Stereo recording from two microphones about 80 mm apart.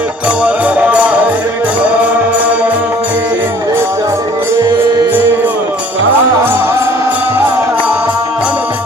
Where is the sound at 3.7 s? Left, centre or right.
Right.